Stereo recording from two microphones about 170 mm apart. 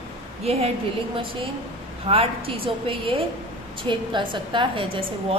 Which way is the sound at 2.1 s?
35° right (ahead or behind).